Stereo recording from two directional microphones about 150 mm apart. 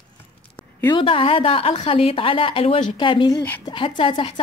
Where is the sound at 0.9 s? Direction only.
35° left (ahead or behind).